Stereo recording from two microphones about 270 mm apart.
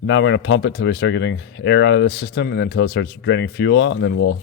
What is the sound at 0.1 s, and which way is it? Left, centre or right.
Speech, left.